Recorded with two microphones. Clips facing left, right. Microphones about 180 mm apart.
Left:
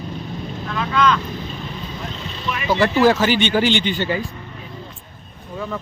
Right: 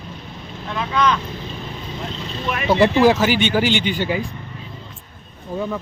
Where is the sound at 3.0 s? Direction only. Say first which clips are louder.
Even; 10° right (ahead or behind).